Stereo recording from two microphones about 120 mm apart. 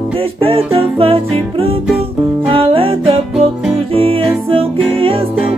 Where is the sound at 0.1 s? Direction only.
50° right (ahead or behind).